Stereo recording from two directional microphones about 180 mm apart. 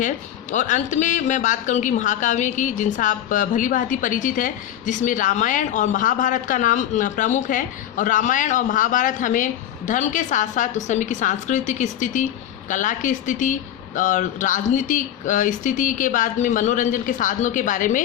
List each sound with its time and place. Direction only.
0.5 s a woman's voice: 40° left (ahead or behind)